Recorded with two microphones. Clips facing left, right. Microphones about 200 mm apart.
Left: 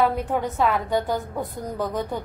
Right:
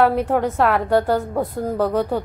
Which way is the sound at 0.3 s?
65° right (ahead or behind).